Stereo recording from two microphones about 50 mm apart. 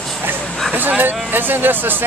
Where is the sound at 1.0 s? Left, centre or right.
Right.